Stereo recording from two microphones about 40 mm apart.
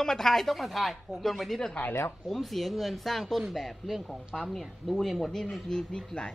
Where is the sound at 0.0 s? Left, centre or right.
Centre.